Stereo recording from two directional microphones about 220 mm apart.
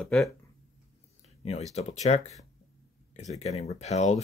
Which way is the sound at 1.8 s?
30° left (ahead or behind).